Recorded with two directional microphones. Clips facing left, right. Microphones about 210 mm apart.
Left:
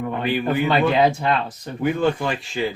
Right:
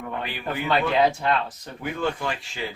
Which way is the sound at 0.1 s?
20° left (ahead or behind).